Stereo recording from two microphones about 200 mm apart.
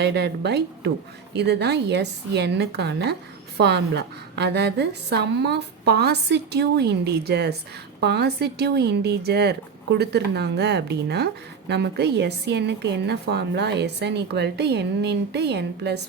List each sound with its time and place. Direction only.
0.0 s a woman's voice: 55° right (ahead or behind)